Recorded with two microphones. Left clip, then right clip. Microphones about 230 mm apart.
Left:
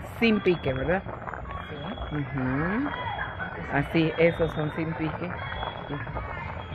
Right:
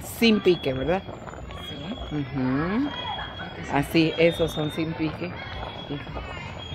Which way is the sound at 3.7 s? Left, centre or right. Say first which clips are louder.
Right 4 dB; centre.